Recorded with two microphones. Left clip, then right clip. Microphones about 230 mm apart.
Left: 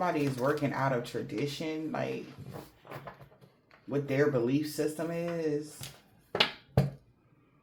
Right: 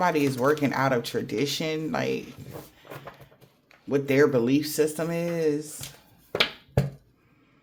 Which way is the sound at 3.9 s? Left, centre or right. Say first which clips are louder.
Right 7 dB; right.